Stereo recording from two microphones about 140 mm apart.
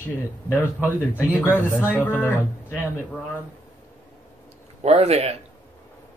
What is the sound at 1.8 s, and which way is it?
Speech, 15° right (ahead or behind).